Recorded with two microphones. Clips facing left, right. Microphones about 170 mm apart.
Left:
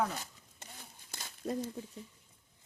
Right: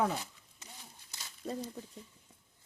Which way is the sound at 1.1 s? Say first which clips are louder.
Left 3 dB; 55° left (ahead or behind).